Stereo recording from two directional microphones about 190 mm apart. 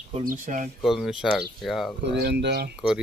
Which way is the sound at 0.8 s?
Centre (ahead or behind).